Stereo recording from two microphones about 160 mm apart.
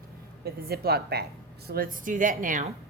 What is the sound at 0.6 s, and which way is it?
Speech, 75° right (ahead or behind).